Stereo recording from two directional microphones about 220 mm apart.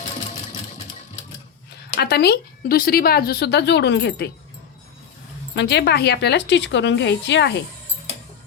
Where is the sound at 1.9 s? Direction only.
50° left (ahead or behind).